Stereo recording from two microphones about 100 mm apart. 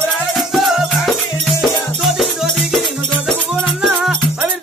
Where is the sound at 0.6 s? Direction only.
Centre (ahead or behind).